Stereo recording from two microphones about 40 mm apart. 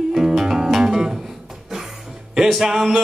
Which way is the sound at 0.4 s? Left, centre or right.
Centre.